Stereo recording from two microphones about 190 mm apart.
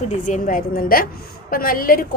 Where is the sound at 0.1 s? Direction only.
40° left (ahead or behind).